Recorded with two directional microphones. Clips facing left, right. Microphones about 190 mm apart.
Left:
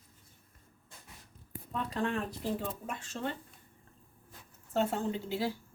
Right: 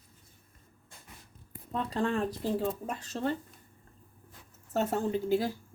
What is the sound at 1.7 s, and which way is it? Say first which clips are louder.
A woman's voice: right 3 dB; 35° right (ahead or behind).